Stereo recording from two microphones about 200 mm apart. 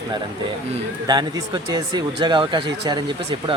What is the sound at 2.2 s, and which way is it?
Speech, 25° right (ahead or behind).